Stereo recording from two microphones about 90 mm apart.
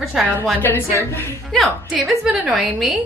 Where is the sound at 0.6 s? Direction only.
25° left (ahead or behind).